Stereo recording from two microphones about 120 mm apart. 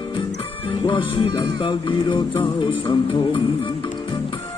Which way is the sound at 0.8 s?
45° left (ahead or behind).